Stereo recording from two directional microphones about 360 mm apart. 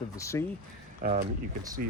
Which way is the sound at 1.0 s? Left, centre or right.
Centre.